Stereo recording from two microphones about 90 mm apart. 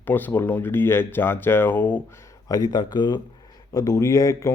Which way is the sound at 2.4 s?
45° left (ahead or behind).